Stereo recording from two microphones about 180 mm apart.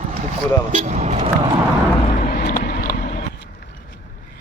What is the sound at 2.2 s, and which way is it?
Vehicle, 50° left (ahead or behind).